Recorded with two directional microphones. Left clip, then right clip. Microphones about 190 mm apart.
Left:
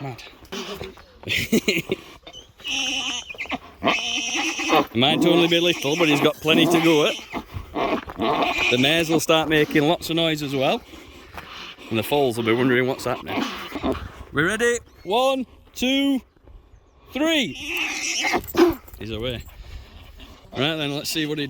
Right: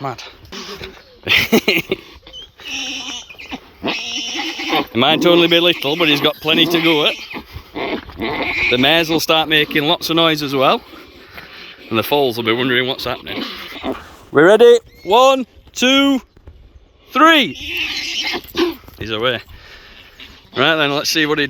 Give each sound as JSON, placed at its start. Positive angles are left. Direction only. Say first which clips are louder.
{"t": 0.0, "sound": "speech", "louder": "right 10 dB", "side_deg": 10}
{"t": 2.6, "sound": "a sound", "louder": "even", "side_deg": 5}
{"t": 3.5, "sound": "a sound", "louder": "even", "side_deg": 20}
{"t": 4.6, "sound": "bleat", "louder": "right 1 dB", "side_deg": 30}
{"t": 4.9, "sound": "speech", "louder": "right 6 dB", "side_deg": 10}
{"t": 7.3, "sound": "goat", "louder": "right 1 dB", "side_deg": 30}
{"t": 8.7, "sound": "speech", "louder": "right 9 dB", "side_deg": 10}
{"t": 14.3, "sound": "speech", "louder": "right 13 dB", "side_deg": -5}
{"t": 14.7, "sound": "speech", "louder": "right 12 dB", "side_deg": 5}
{"t": 18.7, "sound": "a sound", "louder": "right 5 dB", "side_deg": 5}
{"t": 20.6, "sound": "speech", "louder": "right 10 dB", "side_deg": 10}